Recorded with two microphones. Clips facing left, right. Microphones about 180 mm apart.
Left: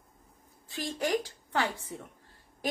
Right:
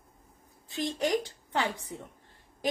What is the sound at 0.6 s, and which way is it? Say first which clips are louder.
A woman's voice: right 2 dB; 20° right (ahead or behind).